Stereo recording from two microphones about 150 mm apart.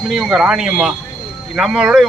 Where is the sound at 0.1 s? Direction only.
Centre (ahead or behind).